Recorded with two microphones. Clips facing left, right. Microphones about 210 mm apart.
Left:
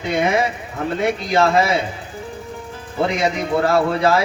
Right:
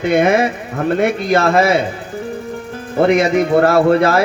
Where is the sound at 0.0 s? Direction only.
55° right (ahead or behind).